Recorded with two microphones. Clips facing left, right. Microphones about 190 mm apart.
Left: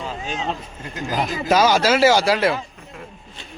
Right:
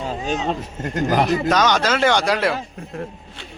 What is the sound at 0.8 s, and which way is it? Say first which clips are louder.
Speech: right 7 dB; 65° right (ahead or behind).